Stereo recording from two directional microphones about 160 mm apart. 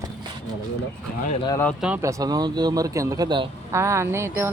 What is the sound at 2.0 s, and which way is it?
Speech, 20° right (ahead or behind).